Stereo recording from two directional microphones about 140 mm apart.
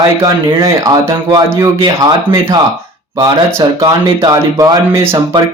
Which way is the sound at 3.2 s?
30° right (ahead or behind).